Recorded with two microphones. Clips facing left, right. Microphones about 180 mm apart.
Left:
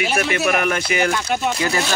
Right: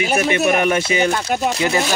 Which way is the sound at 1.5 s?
20° right (ahead or behind).